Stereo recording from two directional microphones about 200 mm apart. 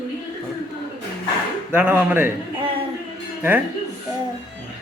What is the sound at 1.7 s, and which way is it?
Speech, 5° right (ahead or behind).